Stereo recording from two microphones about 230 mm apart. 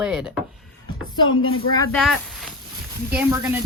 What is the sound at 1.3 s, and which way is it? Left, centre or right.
Speech, left.